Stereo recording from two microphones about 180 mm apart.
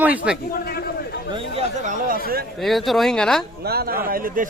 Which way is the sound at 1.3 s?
35° right (ahead or behind).